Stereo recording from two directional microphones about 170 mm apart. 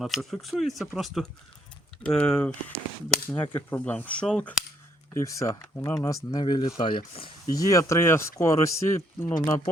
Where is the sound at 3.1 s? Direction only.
10° left (ahead or behind).